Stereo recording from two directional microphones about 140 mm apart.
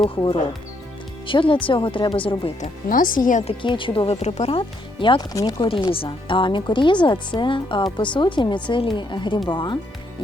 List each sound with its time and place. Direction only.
1.3 s speech: 35° left (ahead or behind)
2.6 s speech: 75° left (ahead or behind)
3.4 s speech: 35° left (ahead or behind)
5.6 s speech: 40° left (ahead or behind)